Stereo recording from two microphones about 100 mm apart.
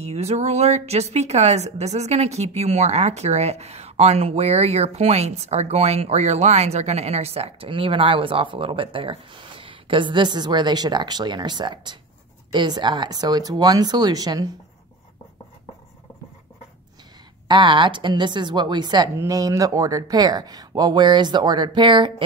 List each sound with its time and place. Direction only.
0.0 s a woman's voice: 90° right; by 14.5 s 40° right (ahead or behind)
17.5 s speech: 55° right (ahead or behind)